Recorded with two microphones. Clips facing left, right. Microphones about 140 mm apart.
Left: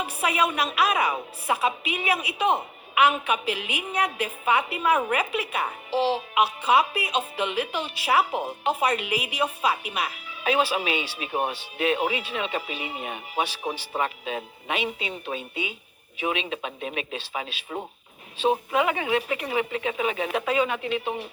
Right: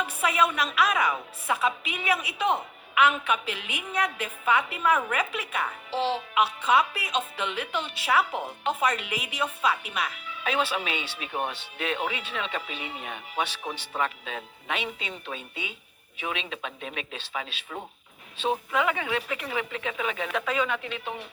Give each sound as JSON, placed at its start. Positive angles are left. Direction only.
{"t": 0.2, "sound": "speech", "side_deg": 15}
{"t": 17.7, "sound": "speech", "side_deg": 30}